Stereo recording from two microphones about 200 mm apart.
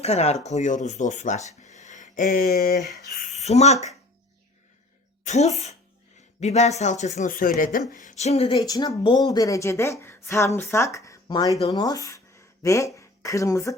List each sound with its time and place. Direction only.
0.0 s speech: 30° left (ahead or behind); by 2.7 s 50° left (ahead or behind)
3.2 s speech: 35° left (ahead or behind)
5.2 s speech: 35° left (ahead or behind)
8.5 s a woman's voice: 20° left (ahead or behind)